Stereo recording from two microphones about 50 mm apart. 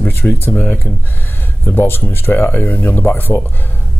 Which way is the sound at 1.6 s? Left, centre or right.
Left.